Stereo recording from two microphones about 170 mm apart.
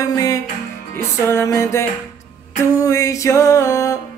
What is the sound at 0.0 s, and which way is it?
Music, 20° left (ahead or behind).